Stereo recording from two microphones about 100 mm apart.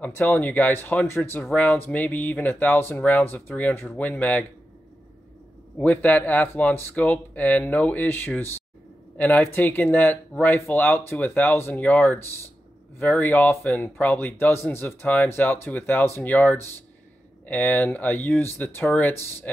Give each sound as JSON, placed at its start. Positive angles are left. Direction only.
{"t": 0.0, "sound": "speech", "side_deg": 15}
{"t": 5.8, "sound": "speech", "side_deg": 15}